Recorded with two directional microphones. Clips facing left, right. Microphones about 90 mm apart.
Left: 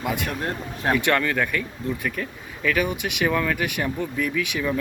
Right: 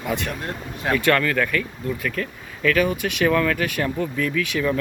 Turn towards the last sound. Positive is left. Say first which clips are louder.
# right 3 dB
turn(degrees=15)  # may be behind; listen again after turning